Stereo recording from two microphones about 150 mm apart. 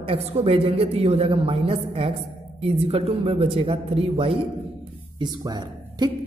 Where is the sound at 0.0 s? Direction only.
40° right (ahead or behind).